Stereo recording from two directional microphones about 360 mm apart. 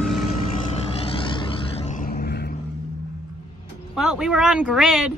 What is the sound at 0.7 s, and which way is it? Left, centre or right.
Vehicle, centre.